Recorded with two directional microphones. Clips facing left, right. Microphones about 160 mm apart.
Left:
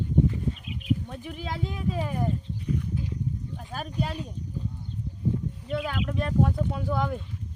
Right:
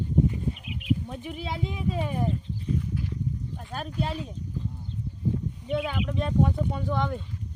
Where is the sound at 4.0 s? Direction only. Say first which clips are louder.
Even; centre (ahead or behind).